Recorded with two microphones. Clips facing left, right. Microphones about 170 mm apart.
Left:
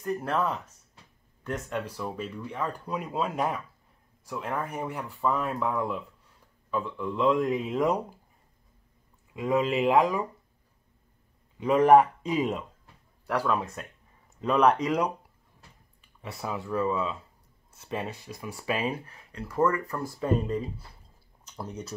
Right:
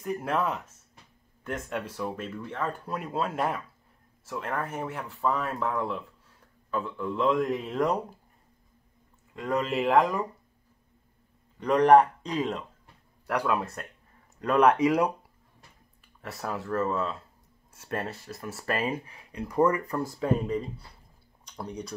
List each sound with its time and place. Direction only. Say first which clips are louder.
0.0 s speech: even; 5° right (ahead or behind)
9.3 s speech: left 3 dB; centre (ahead or behind)
11.6 s speech: even; 5° left (ahead or behind)
13.3 s speech: even; 5° right (ahead or behind)
16.2 s speech: even; centre (ahead or behind)
16.9 s speech: even; 10° left (ahead or behind)
17.7 s speech: right 1 dB; centre (ahead or behind)
18.9 s speech: even; 10° right (ahead or behind)
20.4 s speech: even; centre (ahead or behind)